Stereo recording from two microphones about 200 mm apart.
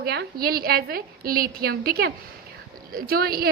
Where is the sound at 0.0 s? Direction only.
50° right (ahead or behind).